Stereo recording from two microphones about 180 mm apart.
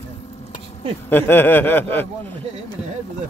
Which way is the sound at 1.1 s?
10° left (ahead or behind).